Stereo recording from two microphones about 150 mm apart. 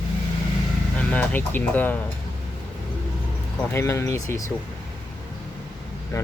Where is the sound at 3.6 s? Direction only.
15° left (ahead or behind).